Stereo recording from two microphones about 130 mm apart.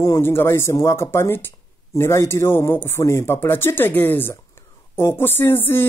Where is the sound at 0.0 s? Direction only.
20° left (ahead or behind).